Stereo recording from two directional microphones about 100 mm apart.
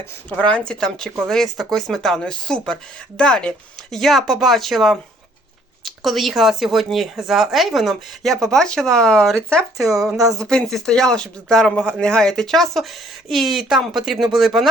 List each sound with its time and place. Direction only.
0.3 s a man's voice: 10° left (ahead or behind)
9.7 s speech: 35° right (ahead or behind)
10.3 s a man's voice: 5° left (ahead or behind)